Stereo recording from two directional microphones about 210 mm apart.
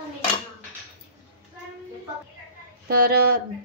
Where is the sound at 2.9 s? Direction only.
45° right (ahead or behind).